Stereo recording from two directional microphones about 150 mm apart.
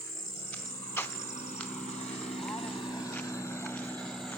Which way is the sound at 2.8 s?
30° left (ahead or behind).